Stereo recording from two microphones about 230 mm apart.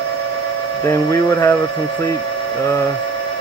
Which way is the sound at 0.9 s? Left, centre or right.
Centre.